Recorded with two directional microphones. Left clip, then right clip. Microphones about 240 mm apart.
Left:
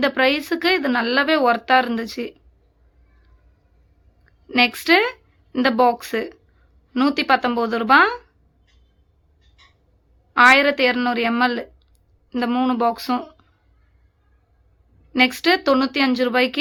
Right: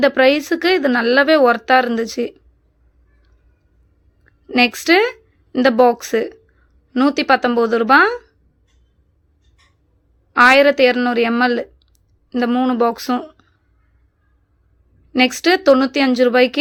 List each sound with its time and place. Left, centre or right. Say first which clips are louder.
0.0 s speech: right 5 dB; centre
4.3 s a woman's voice: right 2 dB; centre
10.3 s speech: right 3 dB; centre
15.2 s speech: right 3 dB; centre